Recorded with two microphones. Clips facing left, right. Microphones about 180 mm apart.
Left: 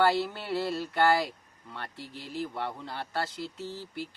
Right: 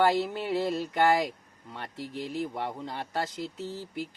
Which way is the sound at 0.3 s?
15° right (ahead or behind).